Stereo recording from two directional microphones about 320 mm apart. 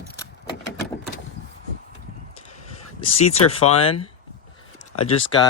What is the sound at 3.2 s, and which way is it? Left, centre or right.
Speech, centre.